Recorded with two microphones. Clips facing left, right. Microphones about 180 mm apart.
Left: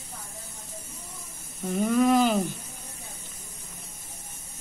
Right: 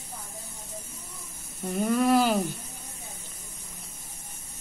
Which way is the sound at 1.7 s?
Centre (ahead or behind).